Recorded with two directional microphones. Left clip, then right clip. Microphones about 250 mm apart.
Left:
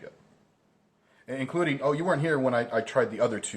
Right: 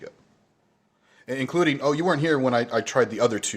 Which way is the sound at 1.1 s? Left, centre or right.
Right.